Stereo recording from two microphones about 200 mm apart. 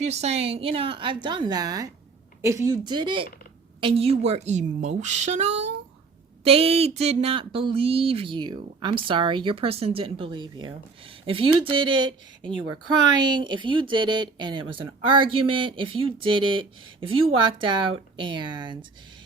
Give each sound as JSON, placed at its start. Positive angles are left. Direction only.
{"t": 0.0, "sound": "a woman's voice", "side_deg": -35}